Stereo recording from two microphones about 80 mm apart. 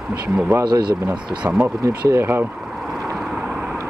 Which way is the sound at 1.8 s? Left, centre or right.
Right.